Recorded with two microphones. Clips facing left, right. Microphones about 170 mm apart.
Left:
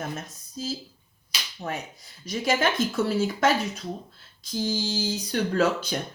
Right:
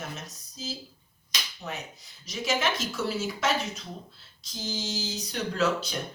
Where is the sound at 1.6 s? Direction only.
30° left (ahead or behind).